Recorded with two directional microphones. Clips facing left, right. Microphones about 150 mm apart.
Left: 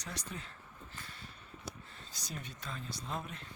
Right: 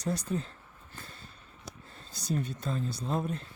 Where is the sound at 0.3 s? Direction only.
35° right (ahead or behind).